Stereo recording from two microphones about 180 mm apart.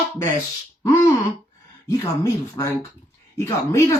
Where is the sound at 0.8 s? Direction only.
15° left (ahead or behind).